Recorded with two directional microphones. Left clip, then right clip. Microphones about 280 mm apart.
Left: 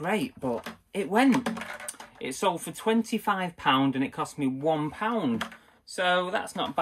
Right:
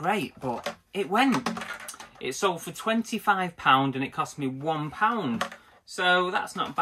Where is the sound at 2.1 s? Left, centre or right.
Centre.